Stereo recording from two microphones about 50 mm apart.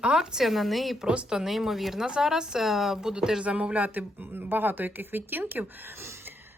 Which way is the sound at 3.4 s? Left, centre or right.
Right.